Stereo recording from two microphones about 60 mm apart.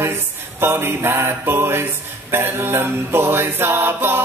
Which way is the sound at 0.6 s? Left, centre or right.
Right.